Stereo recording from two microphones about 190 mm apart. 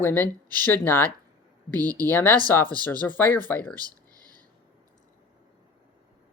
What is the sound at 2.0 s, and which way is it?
Speech, 10° left (ahead or behind).